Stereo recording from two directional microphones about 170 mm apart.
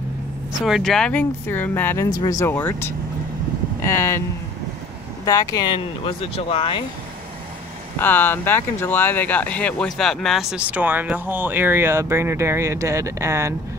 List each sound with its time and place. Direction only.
0.7 s speech: centre (ahead or behind)
5.2 s speech: 20° left (ahead or behind)
8.0 s speech: 10° left (ahead or behind); by 13.6 s 15° right (ahead or behind)